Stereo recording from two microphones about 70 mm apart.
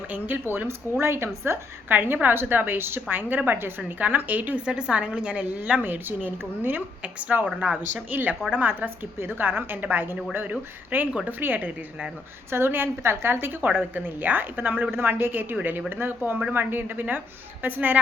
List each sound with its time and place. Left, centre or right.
0.3 s speech: right
1.9 s a woman's voice: right
5.8 s a woman's voice: right
7.0 s a woman's voice: centre
8.1 s a woman's voice: right